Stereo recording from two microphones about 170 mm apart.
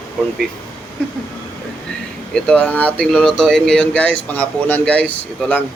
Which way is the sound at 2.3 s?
5° left (ahead or behind).